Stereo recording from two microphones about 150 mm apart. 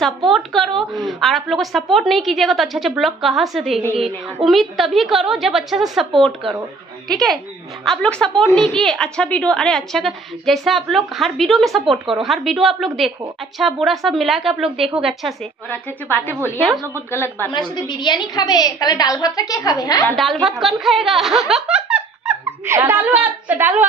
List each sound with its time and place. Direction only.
0.3 s a woman's voice: centre (ahead or behind)
15.7 s a woman's voice: 15° left (ahead or behind)
17.6 s a woman's voice: 30° left (ahead or behind)
20.1 s a woman's voice: centre (ahead or behind)